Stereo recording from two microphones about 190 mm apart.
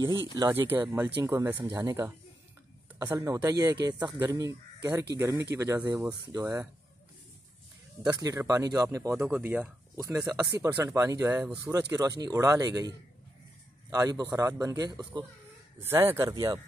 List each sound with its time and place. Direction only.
0.4 s speech: 10° right (ahead or behind)
8.0 s a man's voice: 20° right (ahead or behind)